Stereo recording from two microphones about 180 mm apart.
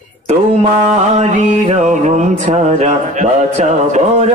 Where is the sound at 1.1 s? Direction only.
40° right (ahead or behind).